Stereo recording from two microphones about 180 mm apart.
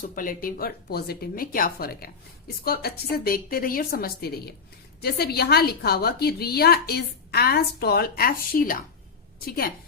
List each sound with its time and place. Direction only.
0.0 s a woman's voice: 50° left (ahead or behind)